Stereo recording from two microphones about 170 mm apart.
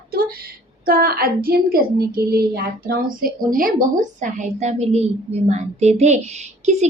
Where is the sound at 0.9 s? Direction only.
60° right (ahead or behind).